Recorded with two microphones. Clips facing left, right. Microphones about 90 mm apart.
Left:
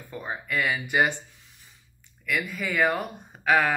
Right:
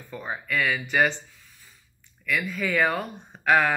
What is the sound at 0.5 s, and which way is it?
Speech, 20° left (ahead or behind).